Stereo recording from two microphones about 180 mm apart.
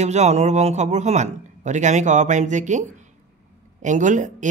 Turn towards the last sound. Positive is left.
turn(degrees=-45)  # may be behind; listen again after turning